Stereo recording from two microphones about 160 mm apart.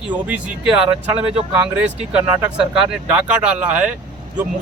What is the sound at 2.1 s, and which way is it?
Speech, 10° right (ahead or behind).